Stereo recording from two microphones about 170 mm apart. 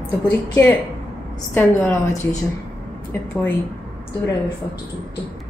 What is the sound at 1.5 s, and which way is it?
Speech, 15° left (ahead or behind).